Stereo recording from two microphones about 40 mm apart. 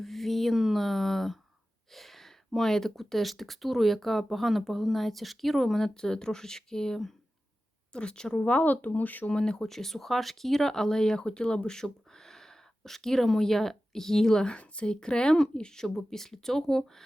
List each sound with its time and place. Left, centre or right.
0.0 s a sound: centre
0.5 s a sound: centre
0.8 s a sound: centre
2.9 s speech: centre
5.9 s speech: centre
8.6 s speech: left
9.3 s speech: centre
9.6 s speech: centre
14.5 s speech: left; by 17.0 s centre